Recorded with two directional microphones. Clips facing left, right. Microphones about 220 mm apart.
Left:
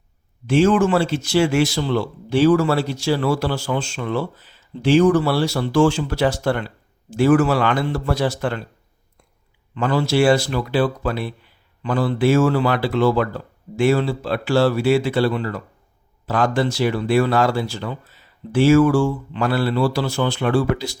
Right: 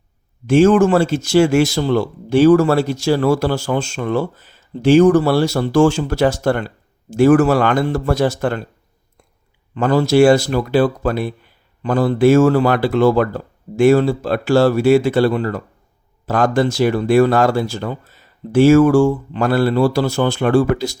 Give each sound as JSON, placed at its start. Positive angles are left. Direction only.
{"t": 0.4, "sound": "speech", "side_deg": -45}
{"t": 9.7, "sound": "speech", "side_deg": -45}